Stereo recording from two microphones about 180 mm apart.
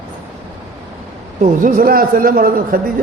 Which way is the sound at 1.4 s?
45° right (ahead or behind).